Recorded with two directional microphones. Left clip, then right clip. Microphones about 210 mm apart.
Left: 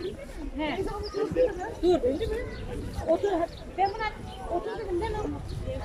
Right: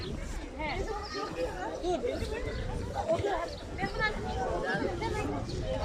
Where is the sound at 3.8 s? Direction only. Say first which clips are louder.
Left 5 dB; 50° left (ahead or behind).